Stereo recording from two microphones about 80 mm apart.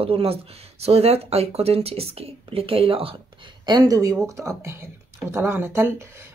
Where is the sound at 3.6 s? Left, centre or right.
Right.